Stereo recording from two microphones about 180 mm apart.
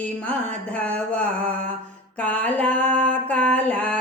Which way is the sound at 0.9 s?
5° left (ahead or behind).